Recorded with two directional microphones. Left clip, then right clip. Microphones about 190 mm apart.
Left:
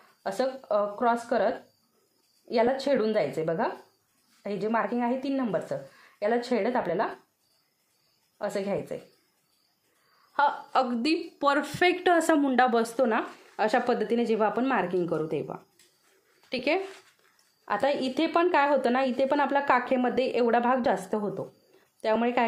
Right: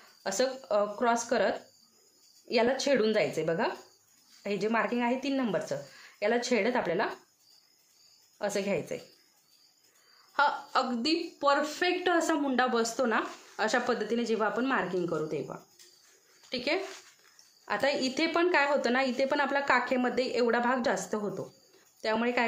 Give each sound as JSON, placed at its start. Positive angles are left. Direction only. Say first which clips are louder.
{"t": 0.2, "sound": "speech", "louder": "left 1 dB", "side_deg": 5}
{"t": 8.4, "sound": "speech", "louder": "left 1 dB", "side_deg": 5}
{"t": 10.7, "sound": "a woman's voice", "louder": "left 3 dB", "side_deg": 25}